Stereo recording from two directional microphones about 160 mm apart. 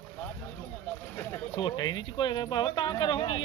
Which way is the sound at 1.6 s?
30° left (ahead or behind).